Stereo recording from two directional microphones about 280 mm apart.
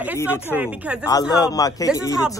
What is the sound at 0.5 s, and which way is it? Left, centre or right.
Speech, centre.